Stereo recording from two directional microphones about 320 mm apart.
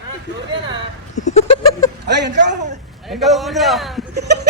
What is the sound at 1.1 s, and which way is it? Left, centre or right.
Goat, left.